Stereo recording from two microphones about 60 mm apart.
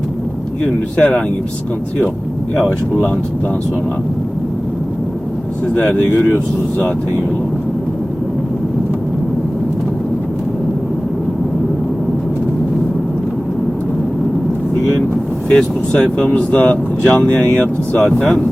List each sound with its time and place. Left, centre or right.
0.6 s speech: left
5.7 s speech: left
15.4 s speech: centre
18.0 s speech: centre